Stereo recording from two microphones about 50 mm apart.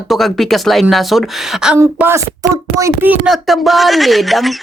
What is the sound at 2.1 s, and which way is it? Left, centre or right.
Speech, right.